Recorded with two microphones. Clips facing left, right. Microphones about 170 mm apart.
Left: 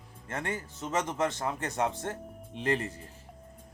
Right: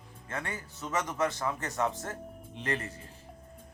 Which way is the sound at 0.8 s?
25° left (ahead or behind).